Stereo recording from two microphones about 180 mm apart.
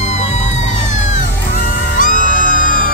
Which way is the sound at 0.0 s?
40° left (ahead or behind).